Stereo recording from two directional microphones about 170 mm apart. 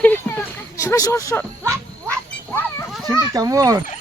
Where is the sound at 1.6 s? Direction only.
15° right (ahead or behind).